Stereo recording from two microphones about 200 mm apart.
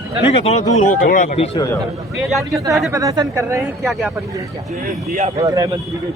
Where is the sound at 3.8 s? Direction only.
Centre (ahead or behind).